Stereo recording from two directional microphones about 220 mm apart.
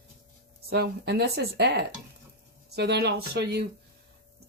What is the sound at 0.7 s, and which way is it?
Speech, 45° right (ahead or behind).